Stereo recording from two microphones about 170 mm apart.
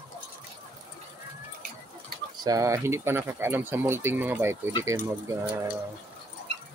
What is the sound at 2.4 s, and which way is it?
Speech, 20° right (ahead or behind).